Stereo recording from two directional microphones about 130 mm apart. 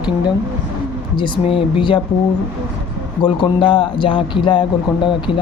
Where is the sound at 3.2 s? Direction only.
35° left (ahead or behind).